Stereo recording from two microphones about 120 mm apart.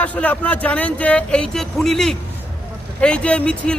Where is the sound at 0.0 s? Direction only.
10° left (ahead or behind).